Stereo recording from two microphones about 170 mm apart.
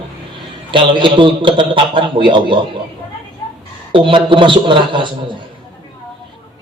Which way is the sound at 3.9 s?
30° right (ahead or behind).